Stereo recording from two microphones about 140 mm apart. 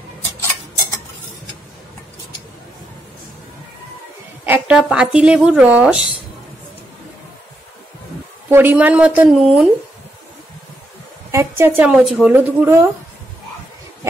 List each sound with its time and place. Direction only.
4.5 s speech: 5° right (ahead or behind)
8.5 s speech: 15° right (ahead or behind)
11.3 s speech: 15° right (ahead or behind)